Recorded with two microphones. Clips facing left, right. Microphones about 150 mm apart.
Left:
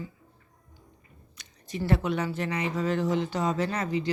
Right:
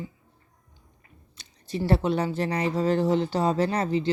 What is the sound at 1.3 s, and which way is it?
Speech, 30° right (ahead or behind).